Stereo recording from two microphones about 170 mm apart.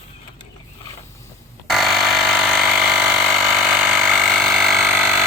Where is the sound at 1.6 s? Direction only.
Centre (ahead or behind).